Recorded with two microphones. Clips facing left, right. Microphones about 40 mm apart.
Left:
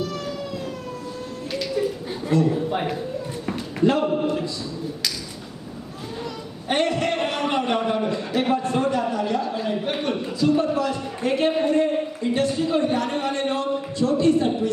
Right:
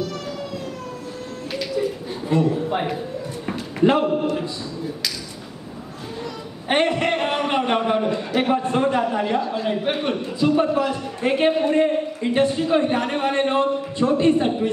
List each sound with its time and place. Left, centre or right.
2.2 s a man's voice: centre
3.8 s a man's voice: right
6.7 s a man's voice: right
9.4 s a man's voice: centre